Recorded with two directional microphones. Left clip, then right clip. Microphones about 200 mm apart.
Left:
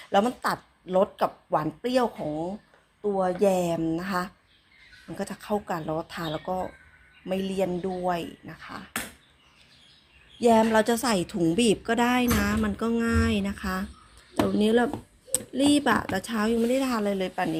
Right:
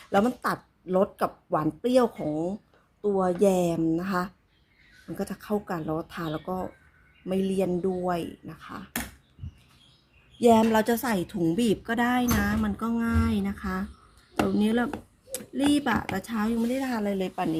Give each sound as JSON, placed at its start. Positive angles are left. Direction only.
{"t": 0.1, "sound": "speech", "side_deg": -25}
{"t": 7.7, "sound": "speech", "side_deg": -10}
{"t": 8.0, "sound": "speech", "side_deg": -20}
{"t": 10.4, "sound": "speech", "side_deg": -25}
{"t": 10.9, "sound": "a woman's voice", "side_deg": -5}